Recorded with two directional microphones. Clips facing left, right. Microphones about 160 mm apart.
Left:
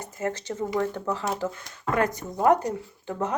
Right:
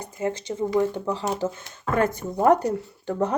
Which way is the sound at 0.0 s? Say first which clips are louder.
Right 2 dB; 15° right (ahead or behind).